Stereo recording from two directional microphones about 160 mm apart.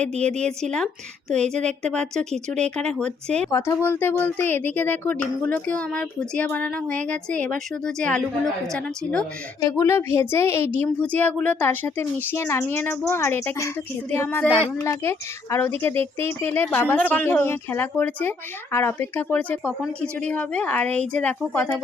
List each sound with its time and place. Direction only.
0.0 s speech: 5° left (ahead or behind)
3.5 s a woman's voice: 20° left (ahead or behind)
9.6 s a woman's voice: 20° left (ahead or behind)